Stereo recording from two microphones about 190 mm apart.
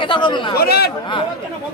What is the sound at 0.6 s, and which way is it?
Speech, 55° left (ahead or behind).